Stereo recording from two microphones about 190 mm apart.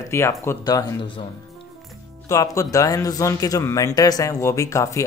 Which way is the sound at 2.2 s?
15° left (ahead or behind).